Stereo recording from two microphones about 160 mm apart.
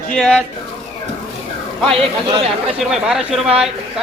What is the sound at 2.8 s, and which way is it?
Speech, 5° right (ahead or behind).